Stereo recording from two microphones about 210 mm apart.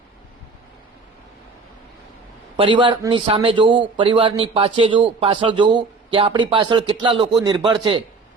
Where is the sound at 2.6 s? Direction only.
25° right (ahead or behind).